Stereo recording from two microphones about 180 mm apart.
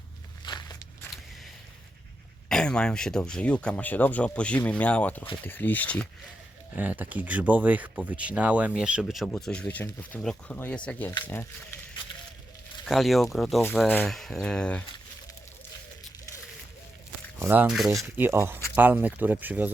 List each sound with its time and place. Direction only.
0.4 s a sound: 25° left (ahead or behind)
2.5 s speech: 5° left (ahead or behind)
6.7 s speech: 10° right (ahead or behind); by 11.8 s 10° left (ahead or behind)
12.8 s speech: centre (ahead or behind)
17.4 s speech: 10° right (ahead or behind)
18.0 s speech: 15° right (ahead or behind)